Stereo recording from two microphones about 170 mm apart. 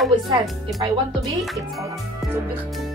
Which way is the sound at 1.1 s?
Centre (ahead or behind).